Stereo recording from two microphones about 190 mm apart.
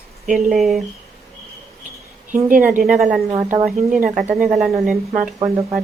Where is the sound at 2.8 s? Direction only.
Centre (ahead or behind).